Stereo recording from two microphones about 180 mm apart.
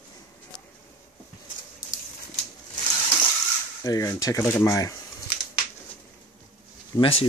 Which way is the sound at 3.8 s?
20° left (ahead or behind).